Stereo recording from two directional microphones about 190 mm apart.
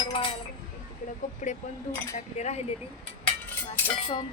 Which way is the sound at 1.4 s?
40° left (ahead or behind).